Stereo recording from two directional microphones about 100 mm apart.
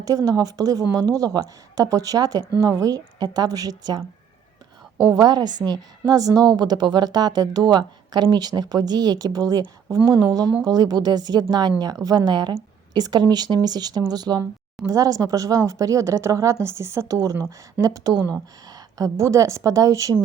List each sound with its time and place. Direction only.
0.0 s a woman's voice: 35° right (ahead or behind)
5.1 s a woman's voice: 40° right (ahead or behind); by 17.2 s 25° right (ahead or behind)
17.7 s a woman's voice: 35° right (ahead or behind)